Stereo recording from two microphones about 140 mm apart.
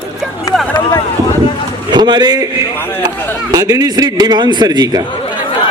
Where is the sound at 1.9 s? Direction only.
30° right (ahead or behind).